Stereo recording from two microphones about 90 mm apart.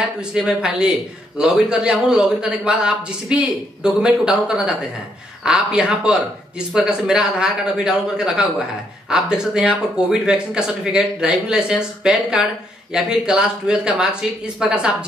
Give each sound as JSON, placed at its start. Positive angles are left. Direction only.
{"t": 0.2, "sound": "speech", "side_deg": -10}